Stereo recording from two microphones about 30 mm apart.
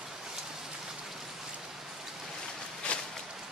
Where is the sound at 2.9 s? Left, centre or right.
Left.